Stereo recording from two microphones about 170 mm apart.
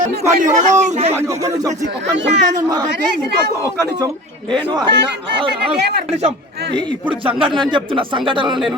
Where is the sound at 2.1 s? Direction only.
90° right.